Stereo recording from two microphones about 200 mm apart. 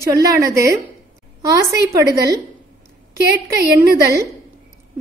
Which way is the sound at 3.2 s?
55° right (ahead or behind).